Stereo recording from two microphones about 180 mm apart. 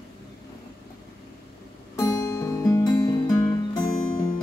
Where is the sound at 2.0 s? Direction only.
20° left (ahead or behind).